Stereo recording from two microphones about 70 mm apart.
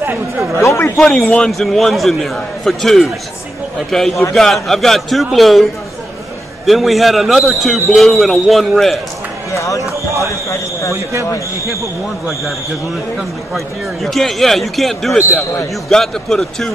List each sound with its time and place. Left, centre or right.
0.6 s speech: left
0.9 s a man's voice: centre
9.5 s speech: left
14.0 s a man's voice: centre